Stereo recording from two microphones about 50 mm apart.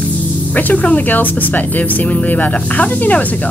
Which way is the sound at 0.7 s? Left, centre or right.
Left.